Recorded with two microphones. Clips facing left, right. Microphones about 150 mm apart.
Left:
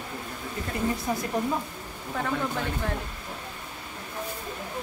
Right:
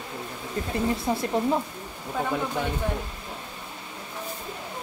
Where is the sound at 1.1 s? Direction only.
25° right (ahead or behind).